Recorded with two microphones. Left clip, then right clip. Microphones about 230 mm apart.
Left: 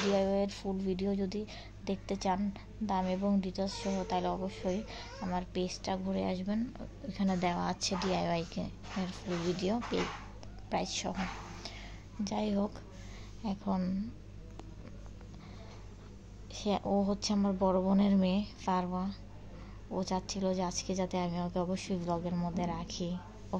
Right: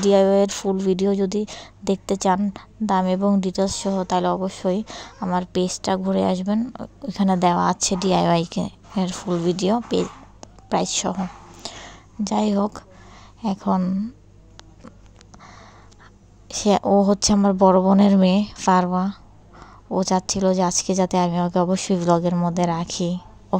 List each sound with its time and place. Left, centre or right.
0.1 s speech: right
11.6 s whispering: right
13.4 s speech: right
16.4 s speech: right